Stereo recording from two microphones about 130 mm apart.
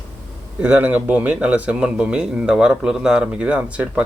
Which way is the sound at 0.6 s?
10° right (ahead or behind).